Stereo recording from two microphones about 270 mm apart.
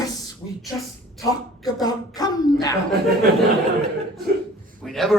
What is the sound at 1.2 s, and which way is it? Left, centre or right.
A woman's voice, centre.